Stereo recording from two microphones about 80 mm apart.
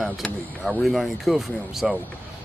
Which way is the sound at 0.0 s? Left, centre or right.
Centre.